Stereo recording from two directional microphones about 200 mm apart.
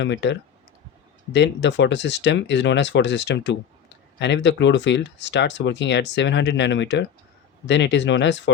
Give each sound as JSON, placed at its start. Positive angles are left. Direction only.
{"t": 0.0, "sound": "speech", "side_deg": 60}